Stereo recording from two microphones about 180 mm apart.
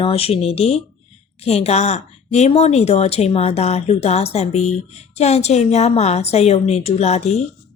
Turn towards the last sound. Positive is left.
turn(degrees=35)  # may be behind; listen again after turning